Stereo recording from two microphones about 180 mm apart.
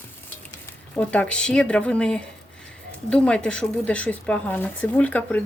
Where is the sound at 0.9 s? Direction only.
5° left (ahead or behind).